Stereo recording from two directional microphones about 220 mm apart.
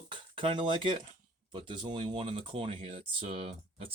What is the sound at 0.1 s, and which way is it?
Speech, 20° right (ahead or behind).